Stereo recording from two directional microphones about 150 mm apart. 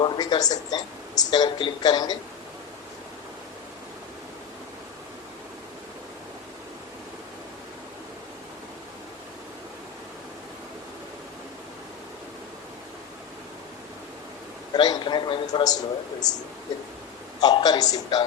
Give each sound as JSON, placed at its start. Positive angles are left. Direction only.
{"t": 0.0, "sound": "speech", "side_deg": 30}
{"t": 14.7, "sound": "a man's voice", "side_deg": 30}
{"t": 17.4, "sound": "speech", "side_deg": 25}